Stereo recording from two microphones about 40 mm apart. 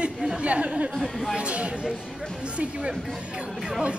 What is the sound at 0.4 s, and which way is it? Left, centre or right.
Speech, right.